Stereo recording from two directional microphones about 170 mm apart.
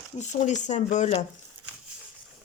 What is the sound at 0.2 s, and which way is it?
Speech, 45° left (ahead or behind).